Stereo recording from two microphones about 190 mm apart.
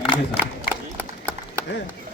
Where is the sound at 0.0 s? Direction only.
5° right (ahead or behind).